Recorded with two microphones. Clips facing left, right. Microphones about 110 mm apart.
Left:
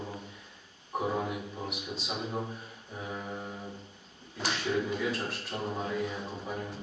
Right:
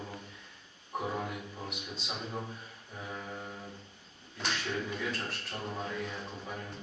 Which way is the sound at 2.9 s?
15° left (ahead or behind).